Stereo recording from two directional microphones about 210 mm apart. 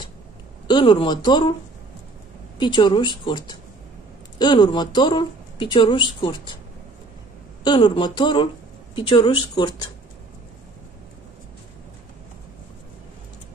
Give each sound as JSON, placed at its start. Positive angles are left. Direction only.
{"t": 0.7, "sound": "a woman's voice", "side_deg": 25}
{"t": 2.6, "sound": "a woman's voice", "side_deg": 20}
{"t": 7.6, "sound": "a woman's voice", "side_deg": 20}